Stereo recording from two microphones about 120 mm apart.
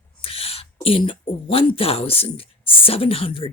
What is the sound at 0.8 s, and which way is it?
Speech, 50° left (ahead or behind).